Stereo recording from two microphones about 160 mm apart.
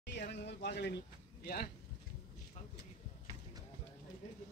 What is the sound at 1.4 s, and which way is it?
Speech, 70° left (ahead or behind).